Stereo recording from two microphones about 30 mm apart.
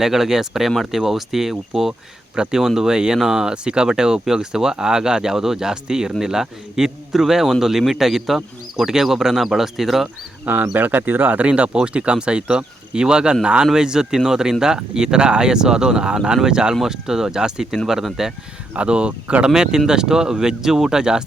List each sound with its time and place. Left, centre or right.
0.0 s speech: centre
1.9 s speech: right
2.6 s speech: centre
3.5 s speech: right; by 10.1 s centre
10.8 s speech: right
11.3 s speech: right
11.7 s speech: right
18.8 s speech: right
19.5 s speech: right